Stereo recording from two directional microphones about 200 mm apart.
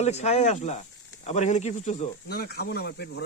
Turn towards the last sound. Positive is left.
turn(degrees=55)  # may be behind; listen again after turning